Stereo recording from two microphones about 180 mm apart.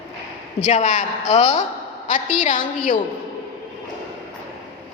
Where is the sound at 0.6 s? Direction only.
40° left (ahead or behind).